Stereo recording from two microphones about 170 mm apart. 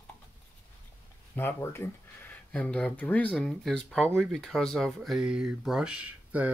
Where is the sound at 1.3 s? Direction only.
15° left (ahead or behind).